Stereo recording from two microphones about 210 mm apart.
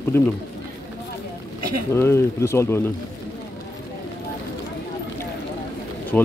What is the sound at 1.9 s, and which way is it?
Speech, 10° left (ahead or behind).